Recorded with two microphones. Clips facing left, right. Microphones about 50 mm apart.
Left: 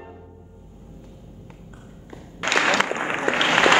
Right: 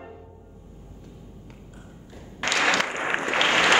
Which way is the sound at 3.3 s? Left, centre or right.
Centre.